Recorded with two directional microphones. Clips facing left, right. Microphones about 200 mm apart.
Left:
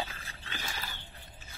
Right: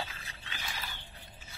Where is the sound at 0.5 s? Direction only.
45° left (ahead or behind).